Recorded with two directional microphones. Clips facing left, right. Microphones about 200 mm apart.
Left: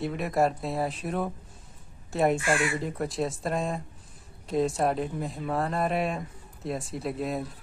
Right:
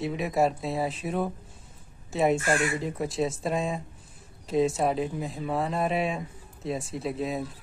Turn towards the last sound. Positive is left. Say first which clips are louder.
# right 1 dB
turn(degrees=0)  # may be behind; listen again after turning